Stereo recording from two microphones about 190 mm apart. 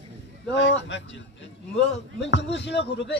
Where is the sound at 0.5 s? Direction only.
70° left (ahead or behind).